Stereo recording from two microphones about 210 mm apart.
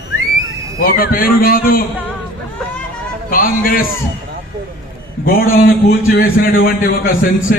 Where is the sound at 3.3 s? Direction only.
45° left (ahead or behind).